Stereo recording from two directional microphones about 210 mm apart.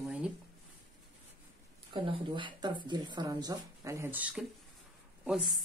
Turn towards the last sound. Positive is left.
turn(degrees=0)  # may be behind; listen again after turning